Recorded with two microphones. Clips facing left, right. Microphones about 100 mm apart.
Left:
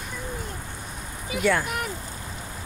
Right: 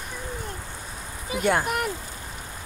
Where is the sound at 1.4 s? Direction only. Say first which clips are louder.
Right 1 dB; 50° right (ahead or behind).